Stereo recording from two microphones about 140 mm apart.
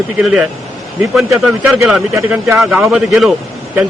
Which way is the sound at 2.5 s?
5° right (ahead or behind).